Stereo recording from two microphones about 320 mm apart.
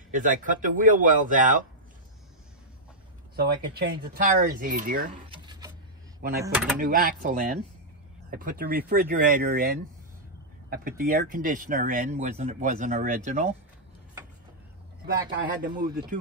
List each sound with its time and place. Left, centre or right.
0.1 s speech: right
3.3 s speech: right; by 6.8 s centre
6.8 s speech: right
15.6 s speech: right